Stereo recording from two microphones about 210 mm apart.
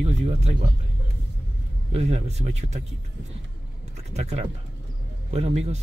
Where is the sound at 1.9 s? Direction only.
30° right (ahead or behind).